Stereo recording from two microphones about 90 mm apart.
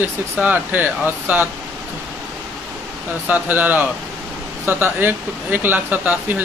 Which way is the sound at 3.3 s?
20° right (ahead or behind).